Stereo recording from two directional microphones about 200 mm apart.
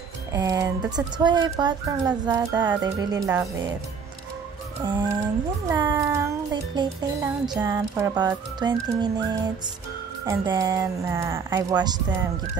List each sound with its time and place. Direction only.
0.3 s speech: 15° right (ahead or behind)
5.7 s speech: 15° right (ahead or behind)